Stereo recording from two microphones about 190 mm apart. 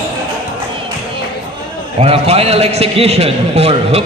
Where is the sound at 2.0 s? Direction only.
30° right (ahead or behind).